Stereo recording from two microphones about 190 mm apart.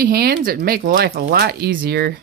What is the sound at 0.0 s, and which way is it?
Speech, 55° right (ahead or behind).